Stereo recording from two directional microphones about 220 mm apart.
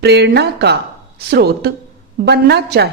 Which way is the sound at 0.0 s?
50° right (ahead or behind).